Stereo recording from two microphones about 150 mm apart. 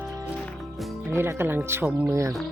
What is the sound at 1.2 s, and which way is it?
Speech, 15° right (ahead or behind).